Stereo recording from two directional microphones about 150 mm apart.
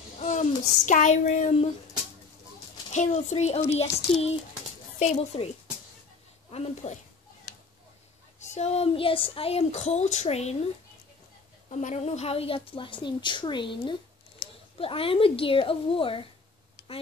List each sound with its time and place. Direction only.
0.2 s a sound: 50° left (ahead or behind)
2.9 s speech: 50° left (ahead or behind)
6.5 s speech: 45° left (ahead or behind)
8.4 s speech: 50° left (ahead or behind)
11.7 s a woman's voice: 50° left (ahead or behind); by 13.9 s 30° left (ahead or behind)
14.4 s a sound: 80° left
14.8 s a woman's voice: 40° left (ahead or behind)